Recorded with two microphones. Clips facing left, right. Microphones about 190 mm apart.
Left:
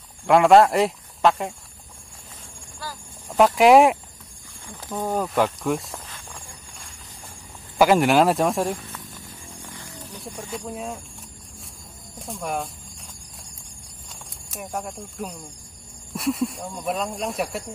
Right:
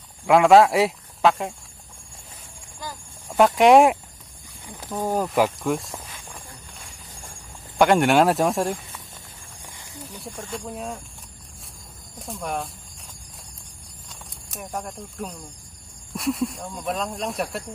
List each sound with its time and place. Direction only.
0.3 s speech: centre (ahead or behind)
3.3 s speech: centre (ahead or behind)
4.6 s speech: 15° right (ahead or behind); by 5.9 s centre (ahead or behind)
7.7 s speech: 5° left (ahead or behind)
10.4 s speech: 5° left (ahead or behind)
12.2 s cricket: centre (ahead or behind)
14.5 s speech: 5° left (ahead or behind)